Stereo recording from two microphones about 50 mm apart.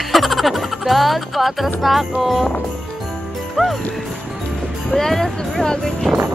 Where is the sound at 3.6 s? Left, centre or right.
Centre.